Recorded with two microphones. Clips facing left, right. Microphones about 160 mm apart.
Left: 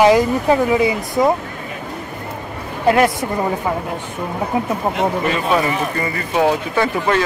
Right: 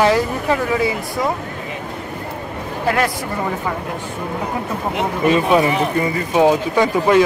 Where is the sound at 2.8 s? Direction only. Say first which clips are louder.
Left 5 dB; 25° left (ahead or behind).